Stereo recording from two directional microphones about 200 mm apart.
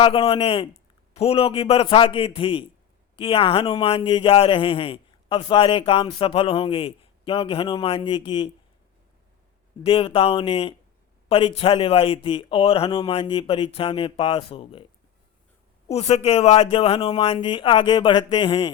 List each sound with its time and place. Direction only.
0.0 s a man's voice: 30° left (ahead or behind)
9.8 s a man's voice: 25° left (ahead or behind)
15.9 s a man's voice: 30° left (ahead or behind)